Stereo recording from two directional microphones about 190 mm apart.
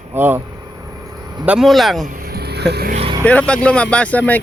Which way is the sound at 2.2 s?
55° right (ahead or behind).